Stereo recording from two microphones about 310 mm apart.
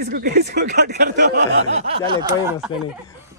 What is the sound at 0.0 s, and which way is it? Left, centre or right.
Speech, right.